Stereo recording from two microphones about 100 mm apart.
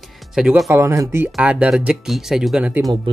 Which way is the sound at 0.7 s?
30° right (ahead or behind).